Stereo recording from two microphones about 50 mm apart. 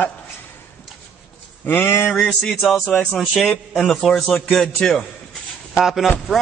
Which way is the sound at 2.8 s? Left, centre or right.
Centre.